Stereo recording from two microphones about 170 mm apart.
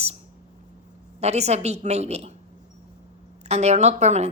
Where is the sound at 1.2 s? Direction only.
40° right (ahead or behind).